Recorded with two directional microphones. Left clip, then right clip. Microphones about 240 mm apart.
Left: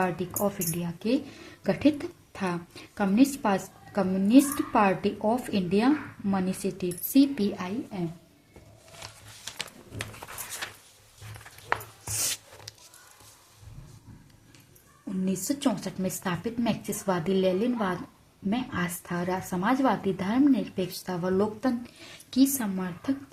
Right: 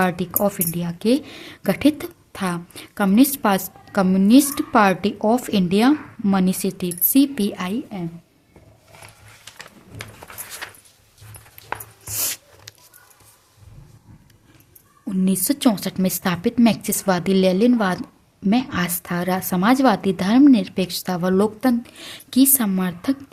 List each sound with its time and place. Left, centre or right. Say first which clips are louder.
0.0 s speech: right 7 dB; right
12.1 s a sound: right 4 dB; right
15.2 s speech: right 9 dB; right